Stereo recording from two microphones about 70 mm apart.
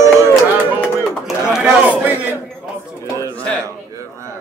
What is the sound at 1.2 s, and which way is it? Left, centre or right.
Speech, centre.